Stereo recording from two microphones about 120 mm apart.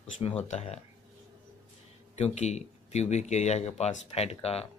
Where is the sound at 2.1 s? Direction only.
70° left (ahead or behind).